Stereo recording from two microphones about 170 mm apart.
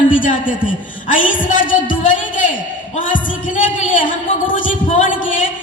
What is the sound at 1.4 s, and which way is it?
A woman's voice, 50° left (ahead or behind).